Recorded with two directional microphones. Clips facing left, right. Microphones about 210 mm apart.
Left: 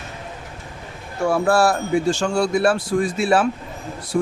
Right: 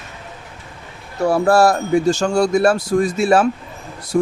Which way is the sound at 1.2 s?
40° right (ahead or behind).